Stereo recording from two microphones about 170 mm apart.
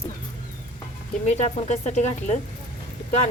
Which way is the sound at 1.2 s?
40° left (ahead or behind).